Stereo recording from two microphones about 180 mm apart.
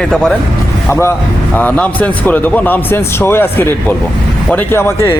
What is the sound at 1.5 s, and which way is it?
Speech, 10° left (ahead or behind).